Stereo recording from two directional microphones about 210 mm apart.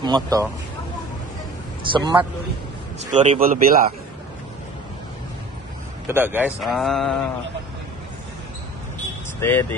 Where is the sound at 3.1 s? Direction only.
35° right (ahead or behind).